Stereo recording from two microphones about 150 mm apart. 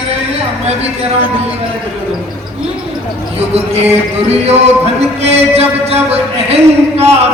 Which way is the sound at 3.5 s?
45° right (ahead or behind).